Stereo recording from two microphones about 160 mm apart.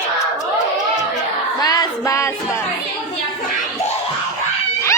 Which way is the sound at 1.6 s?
20° left (ahead or behind).